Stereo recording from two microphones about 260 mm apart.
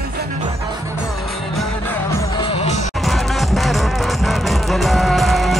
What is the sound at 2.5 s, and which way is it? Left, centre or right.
Music, left.